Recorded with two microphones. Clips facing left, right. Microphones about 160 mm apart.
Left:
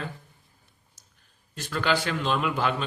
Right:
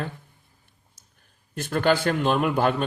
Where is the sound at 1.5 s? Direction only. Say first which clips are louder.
Right 5 dB; 55° right (ahead or behind).